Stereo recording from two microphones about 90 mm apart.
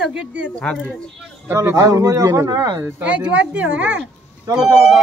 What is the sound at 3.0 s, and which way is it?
Speech, 15° right (ahead or behind).